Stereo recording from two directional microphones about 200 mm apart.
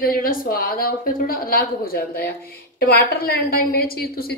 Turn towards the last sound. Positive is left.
turn(degrees=50)  # may be behind; listen again after turning